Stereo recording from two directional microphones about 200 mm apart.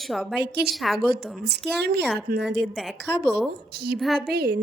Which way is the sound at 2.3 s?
45° right (ahead or behind).